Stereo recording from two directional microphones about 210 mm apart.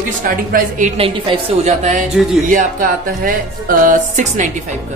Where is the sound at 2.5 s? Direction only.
40° right (ahead or behind).